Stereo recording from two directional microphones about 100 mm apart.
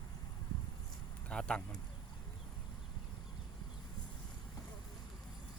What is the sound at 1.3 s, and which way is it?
Speech, 10° left (ahead or behind).